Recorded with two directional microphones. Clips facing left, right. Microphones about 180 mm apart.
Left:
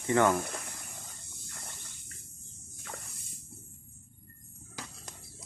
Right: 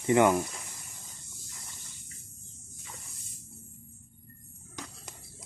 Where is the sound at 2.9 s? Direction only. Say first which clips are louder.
Left 6 dB; 60° left (ahead or behind).